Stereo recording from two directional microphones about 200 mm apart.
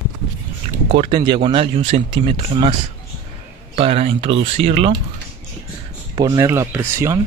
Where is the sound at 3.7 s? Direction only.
30° right (ahead or behind).